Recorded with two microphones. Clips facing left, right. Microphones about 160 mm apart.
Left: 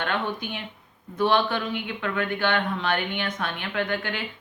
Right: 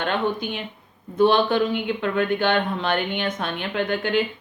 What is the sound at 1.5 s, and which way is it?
Speech, 25° right (ahead or behind).